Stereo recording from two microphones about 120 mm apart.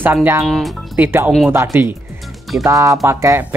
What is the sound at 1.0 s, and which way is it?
Speech, 15° right (ahead or behind).